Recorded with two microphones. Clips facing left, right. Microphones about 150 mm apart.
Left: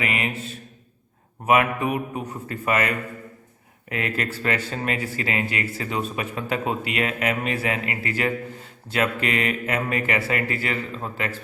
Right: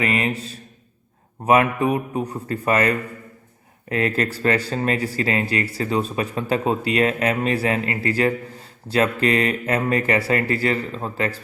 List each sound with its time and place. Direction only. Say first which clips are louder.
0.0 s speech: right 5 dB; 35° right (ahead or behind)